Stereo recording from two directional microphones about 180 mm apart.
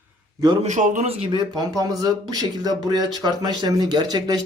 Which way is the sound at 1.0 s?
30° right (ahead or behind).